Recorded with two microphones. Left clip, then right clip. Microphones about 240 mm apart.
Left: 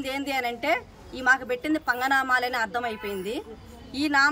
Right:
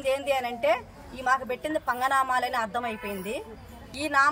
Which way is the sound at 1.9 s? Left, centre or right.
Centre.